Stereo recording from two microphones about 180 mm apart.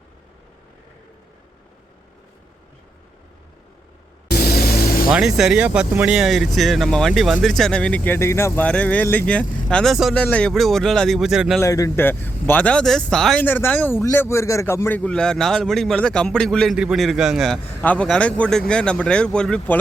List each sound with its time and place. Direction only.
4.3 s vehicle: 60° left (ahead or behind)
5.0 s speech: 5° right (ahead or behind)
11.6 s speech: 15° left (ahead or behind)